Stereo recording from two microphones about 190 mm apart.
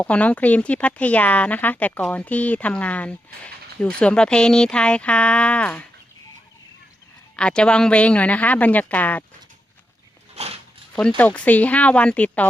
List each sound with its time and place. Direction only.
0.0 s speech: 5° left (ahead or behind)
7.3 s speech: 5° left (ahead or behind)
10.3 s a sound: 35° right (ahead or behind)
11.2 s speech: 10° left (ahead or behind)